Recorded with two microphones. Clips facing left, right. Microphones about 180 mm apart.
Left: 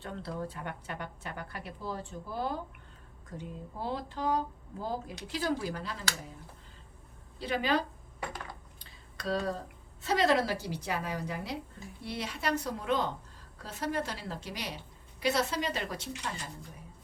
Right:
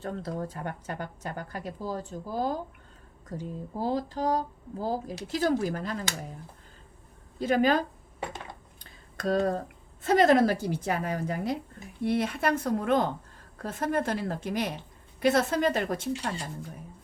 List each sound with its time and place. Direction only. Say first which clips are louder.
0.0 s speech: right 4 dB; 40° right (ahead or behind)
7.3 s a woman's voice: right 6 dB; 45° right (ahead or behind)
8.2 s cutlery: right 3 dB; 25° right (ahead or behind)
8.8 s a woman's voice: right 8 dB; 50° right (ahead or behind)